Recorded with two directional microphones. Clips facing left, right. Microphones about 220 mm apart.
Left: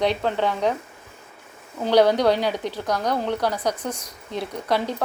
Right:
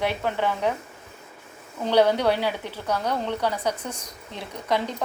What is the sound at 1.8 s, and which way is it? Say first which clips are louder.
A woman's voice: left 3 dB; 10° left (ahead or behind).